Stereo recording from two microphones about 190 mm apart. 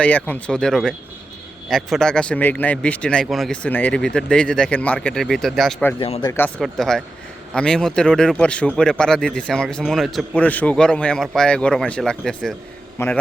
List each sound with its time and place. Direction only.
0.0 s speech: 5° left (ahead or behind)
6.0 s speech: 30° left (ahead or behind)
6.6 s speech: centre (ahead or behind)